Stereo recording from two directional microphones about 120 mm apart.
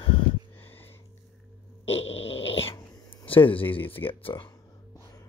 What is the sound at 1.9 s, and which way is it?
Dog, 55° left (ahead or behind).